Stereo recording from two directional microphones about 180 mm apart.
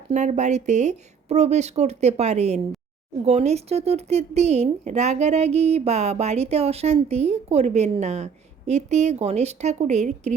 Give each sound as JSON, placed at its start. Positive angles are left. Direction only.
{"t": 0.1, "sound": "a woman's voice", "side_deg": -40}